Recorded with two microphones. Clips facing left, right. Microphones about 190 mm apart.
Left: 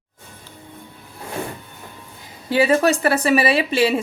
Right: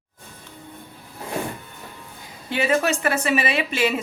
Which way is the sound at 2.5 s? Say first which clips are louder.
Left 5 dB; 35° left (ahead or behind).